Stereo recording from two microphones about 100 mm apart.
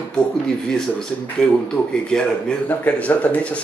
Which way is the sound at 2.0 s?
10° left (ahead or behind).